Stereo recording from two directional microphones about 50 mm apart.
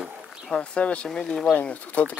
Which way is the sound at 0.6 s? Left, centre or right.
Left.